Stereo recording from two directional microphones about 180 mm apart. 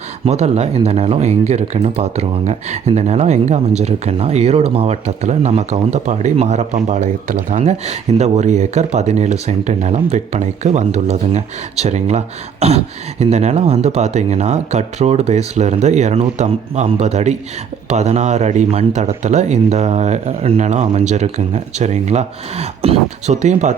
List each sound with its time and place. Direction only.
0.3 s speech: 35° right (ahead or behind)